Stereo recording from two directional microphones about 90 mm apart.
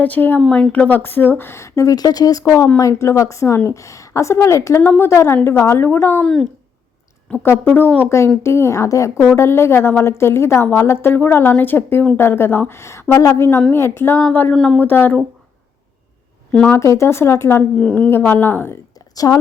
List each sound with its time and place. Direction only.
0.0 s a woman's voice: 20° left (ahead or behind)
6.2 s speech: 5° left (ahead or behind)
7.4 s a woman's voice: 25° left (ahead or behind)
14.5 s speech: 5° left (ahead or behind)
14.8 s a woman's voice: 20° left (ahead or behind)
16.6 s a woman's voice: 30° left (ahead or behind)
17.6 s a woman's voice: 10° left (ahead or behind)
18.1 s a woman's voice: 25° left (ahead or behind)
19.1 s speech: 45° left (ahead or behind)